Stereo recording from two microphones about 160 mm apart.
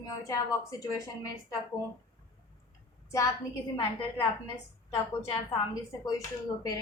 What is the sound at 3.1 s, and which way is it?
Speech, 20° left (ahead or behind).